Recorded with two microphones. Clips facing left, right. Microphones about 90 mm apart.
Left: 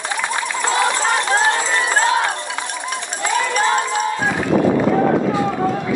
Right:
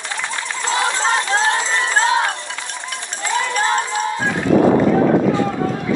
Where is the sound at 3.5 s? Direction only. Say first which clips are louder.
Left 1 dB; 20° left (ahead or behind).